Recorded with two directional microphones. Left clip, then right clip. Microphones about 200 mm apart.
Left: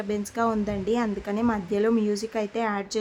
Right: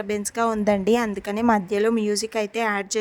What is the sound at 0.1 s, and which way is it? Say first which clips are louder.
Speech: right 3 dB; 40° right (ahead or behind).